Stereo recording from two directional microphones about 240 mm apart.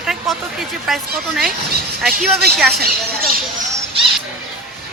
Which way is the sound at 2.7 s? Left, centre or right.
Right.